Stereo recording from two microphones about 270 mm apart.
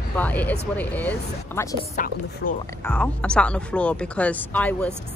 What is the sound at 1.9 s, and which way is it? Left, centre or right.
Speech, left.